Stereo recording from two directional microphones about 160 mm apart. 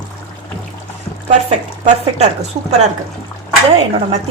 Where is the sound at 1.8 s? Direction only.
45° right (ahead or behind).